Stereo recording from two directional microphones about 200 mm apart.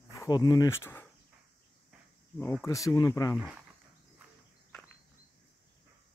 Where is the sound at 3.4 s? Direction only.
5° right (ahead or behind).